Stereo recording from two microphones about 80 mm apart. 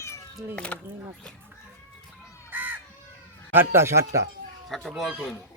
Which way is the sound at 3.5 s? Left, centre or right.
Right.